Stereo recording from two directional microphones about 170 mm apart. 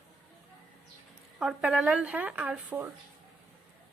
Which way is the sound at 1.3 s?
5° right (ahead or behind).